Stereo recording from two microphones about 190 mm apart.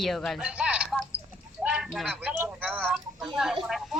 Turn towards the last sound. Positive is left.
turn(degrees=0)  # may be behind; listen again after turning